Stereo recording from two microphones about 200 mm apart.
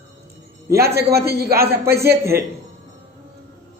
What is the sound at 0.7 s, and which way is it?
Speech, 50° right (ahead or behind).